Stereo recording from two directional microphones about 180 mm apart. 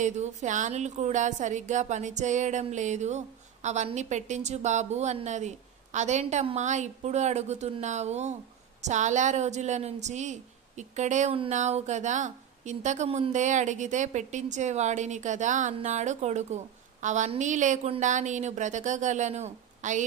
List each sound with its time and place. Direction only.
0.0 s a woman's voice: 40° right (ahead or behind)